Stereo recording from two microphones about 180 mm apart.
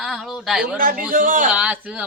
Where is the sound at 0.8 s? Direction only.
50° right (ahead or behind).